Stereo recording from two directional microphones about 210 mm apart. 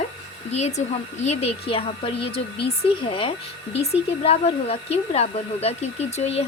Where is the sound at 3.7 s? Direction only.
30° left (ahead or behind).